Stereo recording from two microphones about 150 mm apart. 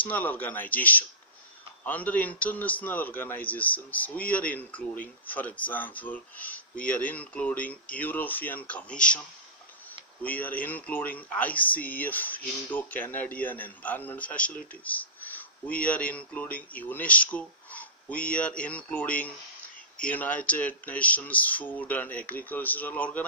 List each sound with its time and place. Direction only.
0.0 s speech: 10° left (ahead or behind)
10.2 s speech: 10° left (ahead or behind)